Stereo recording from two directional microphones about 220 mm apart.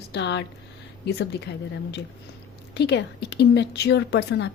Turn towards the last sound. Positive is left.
turn(degrees=50)  # may be behind; listen again after turning